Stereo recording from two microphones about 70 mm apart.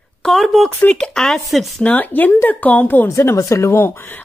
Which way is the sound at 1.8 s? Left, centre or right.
Left.